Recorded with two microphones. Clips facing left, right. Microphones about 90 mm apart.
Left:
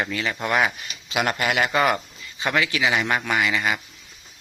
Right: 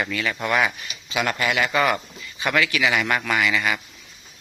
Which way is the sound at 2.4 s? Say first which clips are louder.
Right 1 dB; 25° left (ahead or behind).